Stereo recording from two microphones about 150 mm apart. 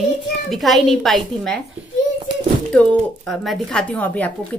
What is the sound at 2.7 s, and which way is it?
A woman's voice, 5° left (ahead or behind).